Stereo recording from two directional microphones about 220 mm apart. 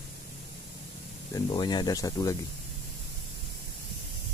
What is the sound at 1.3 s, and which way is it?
Speech, 20° left (ahead or behind).